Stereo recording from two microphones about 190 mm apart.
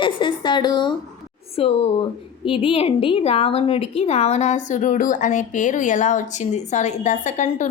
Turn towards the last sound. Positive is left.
turn(degrees=40)  # may be behind; listen again after turning